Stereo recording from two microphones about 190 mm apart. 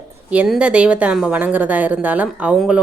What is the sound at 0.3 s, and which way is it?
A woman's voice, 5° right (ahead or behind).